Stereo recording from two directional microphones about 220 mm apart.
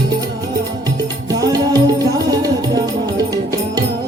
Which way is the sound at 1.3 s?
15° right (ahead or behind).